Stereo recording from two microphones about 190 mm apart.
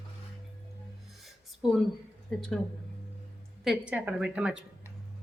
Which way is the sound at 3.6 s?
5° right (ahead or behind).